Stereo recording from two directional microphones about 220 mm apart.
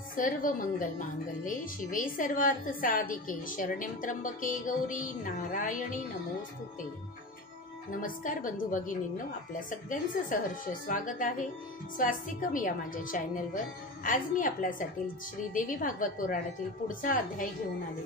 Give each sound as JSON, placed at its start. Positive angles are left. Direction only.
{"t": 0.1, "sound": "a woman's voice", "side_deg": 40}
{"t": 7.9, "sound": "a woman's voice", "side_deg": 40}